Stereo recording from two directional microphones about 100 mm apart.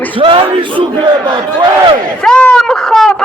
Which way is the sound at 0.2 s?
60° right (ahead or behind).